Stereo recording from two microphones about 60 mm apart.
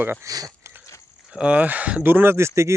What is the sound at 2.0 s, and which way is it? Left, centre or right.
Speech, right.